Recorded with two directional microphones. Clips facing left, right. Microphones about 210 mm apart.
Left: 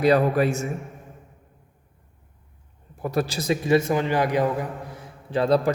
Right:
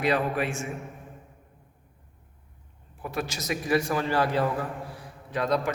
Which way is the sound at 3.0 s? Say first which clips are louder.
Left 7 dB; 40° left (ahead or behind).